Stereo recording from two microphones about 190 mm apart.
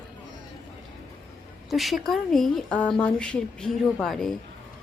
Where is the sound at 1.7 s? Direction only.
Centre (ahead or behind).